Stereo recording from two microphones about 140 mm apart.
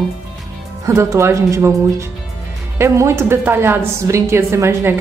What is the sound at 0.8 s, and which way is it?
A woman's voice, 20° right (ahead or behind).